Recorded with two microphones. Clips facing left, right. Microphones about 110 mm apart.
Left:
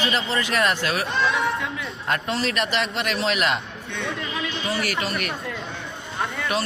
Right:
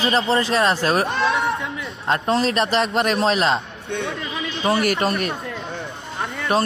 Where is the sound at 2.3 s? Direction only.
40° right (ahead or behind).